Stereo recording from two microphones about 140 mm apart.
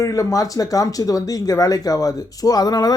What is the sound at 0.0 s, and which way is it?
Speech, 25° left (ahead or behind).